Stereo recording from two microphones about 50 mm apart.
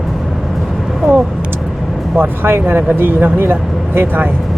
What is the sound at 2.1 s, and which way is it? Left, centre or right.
Speech, right.